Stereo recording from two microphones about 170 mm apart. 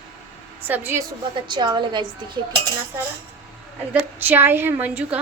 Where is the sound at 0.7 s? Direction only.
10° right (ahead or behind).